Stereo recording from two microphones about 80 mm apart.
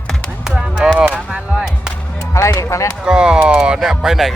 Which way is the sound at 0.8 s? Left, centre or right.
Centre.